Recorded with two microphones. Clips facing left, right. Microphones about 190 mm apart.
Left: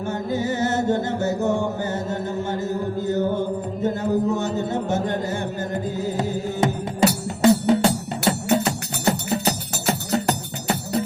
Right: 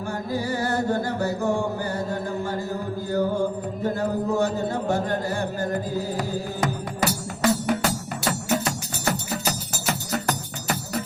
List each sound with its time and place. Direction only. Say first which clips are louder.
0.0 s chant: left 3 dB; 20° left (ahead or behind)
7.7 s music: left 6 dB; 25° left (ahead or behind)